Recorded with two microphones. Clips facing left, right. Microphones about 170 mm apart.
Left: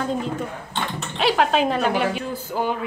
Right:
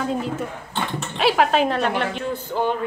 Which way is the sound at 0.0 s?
5° right (ahead or behind).